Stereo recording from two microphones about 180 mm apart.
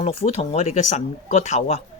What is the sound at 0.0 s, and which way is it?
Speech, 35° left (ahead or behind).